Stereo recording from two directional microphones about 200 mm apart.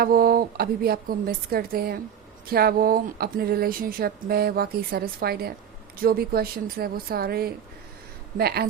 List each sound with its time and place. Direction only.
0.0 s speech: 45° right (ahead or behind)